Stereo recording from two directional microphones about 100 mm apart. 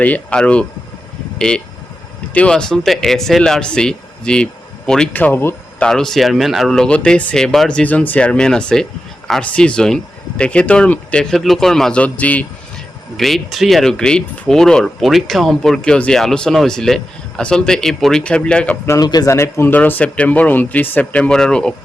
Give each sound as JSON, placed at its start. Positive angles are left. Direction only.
{"t": 0.0, "sound": "speech", "side_deg": 15}
{"t": 5.1, "sound": "speech", "side_deg": 20}
{"t": 5.8, "sound": "speech", "side_deg": 5}
{"t": 11.2, "sound": "speech", "side_deg": 5}
{"t": 13.1, "sound": "speech", "side_deg": 0}
{"t": 18.9, "sound": "speech", "side_deg": 40}
{"t": 19.3, "sound": "speech", "side_deg": 25}